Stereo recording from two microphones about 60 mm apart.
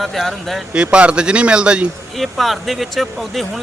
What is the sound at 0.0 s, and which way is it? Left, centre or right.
Speech, centre.